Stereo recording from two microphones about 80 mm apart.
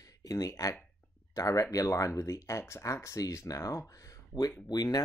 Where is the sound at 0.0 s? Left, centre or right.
Left.